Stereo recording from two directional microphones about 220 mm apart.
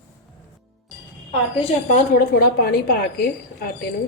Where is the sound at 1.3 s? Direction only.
25° left (ahead or behind).